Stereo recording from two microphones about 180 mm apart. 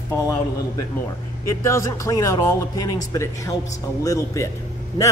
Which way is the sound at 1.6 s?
15° left (ahead or behind).